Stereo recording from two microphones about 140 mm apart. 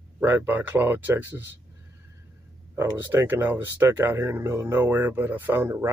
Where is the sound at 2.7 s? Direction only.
15° right (ahead or behind).